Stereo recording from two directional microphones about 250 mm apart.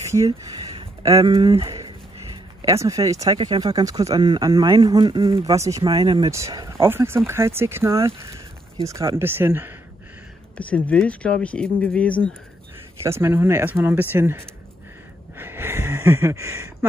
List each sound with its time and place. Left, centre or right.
0.0 s speech: centre
10.6 s speech: centre
13.0 s speech: centre
15.3 s a sound: centre